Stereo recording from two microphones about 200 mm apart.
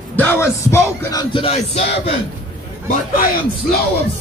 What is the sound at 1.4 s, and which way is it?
Music, 30° left (ahead or behind).